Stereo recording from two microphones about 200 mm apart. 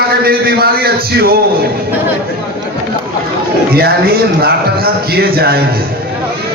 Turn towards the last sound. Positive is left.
turn(degrees=-50)  # may be behind; listen again after turning